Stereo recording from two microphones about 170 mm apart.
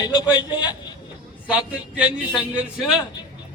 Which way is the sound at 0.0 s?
25° left (ahead or behind).